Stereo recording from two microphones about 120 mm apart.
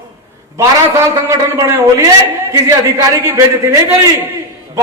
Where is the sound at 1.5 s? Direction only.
25° right (ahead or behind).